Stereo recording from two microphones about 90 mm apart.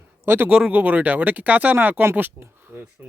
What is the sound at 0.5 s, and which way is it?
A man's voice, 15° right (ahead or behind).